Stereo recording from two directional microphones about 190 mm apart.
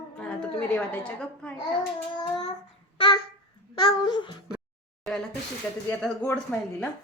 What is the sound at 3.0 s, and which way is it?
Babbling, 25° left (ahead or behind).